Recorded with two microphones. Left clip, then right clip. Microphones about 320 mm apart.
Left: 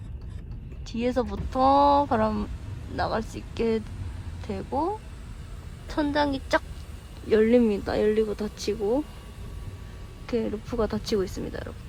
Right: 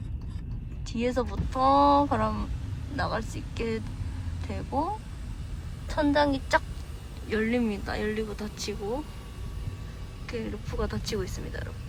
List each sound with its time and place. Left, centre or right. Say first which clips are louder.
0.9 s speech: left 2 dB; centre
5.9 s a woman's voice: right 1 dB; centre
10.2 s speech: left 7 dB; centre